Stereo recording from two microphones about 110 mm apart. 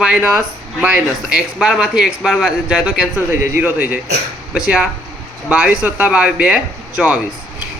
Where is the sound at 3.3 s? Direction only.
20° right (ahead or behind).